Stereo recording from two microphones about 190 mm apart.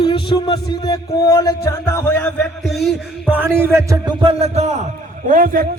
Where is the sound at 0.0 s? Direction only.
25° left (ahead or behind).